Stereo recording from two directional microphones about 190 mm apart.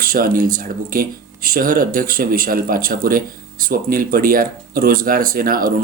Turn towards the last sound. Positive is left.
turn(degrees=-50)  # may be behind; listen again after turning